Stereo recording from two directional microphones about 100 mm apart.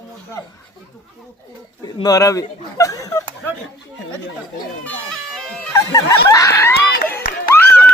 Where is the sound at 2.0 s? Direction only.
35° left (ahead or behind).